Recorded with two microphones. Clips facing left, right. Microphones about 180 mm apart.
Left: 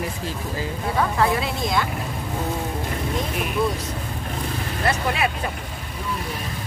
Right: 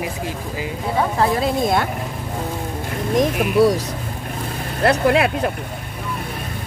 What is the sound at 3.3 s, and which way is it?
Speech, 80° right.